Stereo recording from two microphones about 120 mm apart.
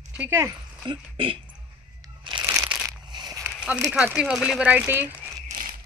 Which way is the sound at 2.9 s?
35° right (ahead or behind).